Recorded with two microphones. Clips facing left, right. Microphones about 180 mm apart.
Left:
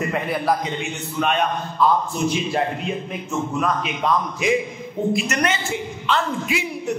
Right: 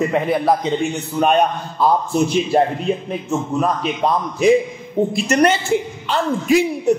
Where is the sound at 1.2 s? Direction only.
40° right (ahead or behind).